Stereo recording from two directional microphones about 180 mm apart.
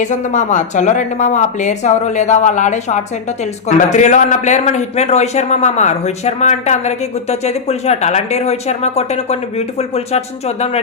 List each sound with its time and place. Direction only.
0.0 s a man's voice: 45° left (ahead or behind)